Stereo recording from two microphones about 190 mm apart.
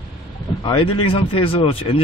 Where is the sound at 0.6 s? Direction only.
30° left (ahead or behind).